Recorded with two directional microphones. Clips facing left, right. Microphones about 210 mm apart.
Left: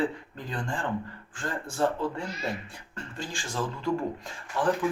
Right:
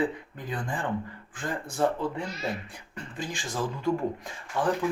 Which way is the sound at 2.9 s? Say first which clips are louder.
Right 2 dB; 15° right (ahead or behind).